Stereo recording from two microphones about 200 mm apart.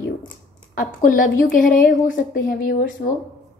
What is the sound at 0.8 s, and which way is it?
A woman's voice, 45° left (ahead or behind).